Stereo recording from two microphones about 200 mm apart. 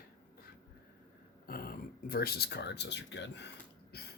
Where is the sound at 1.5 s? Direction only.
50° left (ahead or behind).